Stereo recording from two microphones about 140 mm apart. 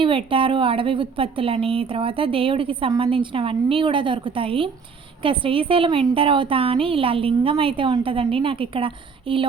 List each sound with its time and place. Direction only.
0.0 s a woman's voice: 40° right (ahead or behind)